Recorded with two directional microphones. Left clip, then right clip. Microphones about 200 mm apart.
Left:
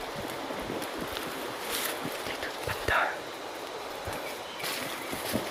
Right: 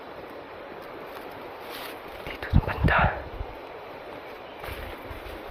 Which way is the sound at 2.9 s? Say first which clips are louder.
Right 4 dB; 10° right (ahead or behind).